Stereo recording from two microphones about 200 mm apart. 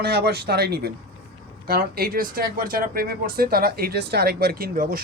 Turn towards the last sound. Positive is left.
turn(degrees=-45)  # may be behind; listen again after turning